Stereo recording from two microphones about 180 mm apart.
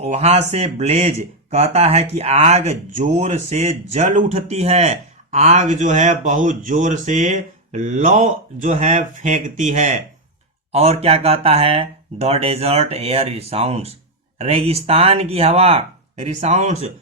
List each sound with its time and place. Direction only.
0.0 s speech: 35° right (ahead or behind)